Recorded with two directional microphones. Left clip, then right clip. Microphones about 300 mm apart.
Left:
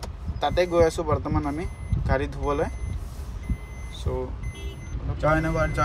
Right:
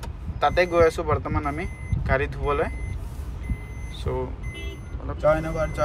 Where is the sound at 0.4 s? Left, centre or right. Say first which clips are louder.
Right 2 dB; centre.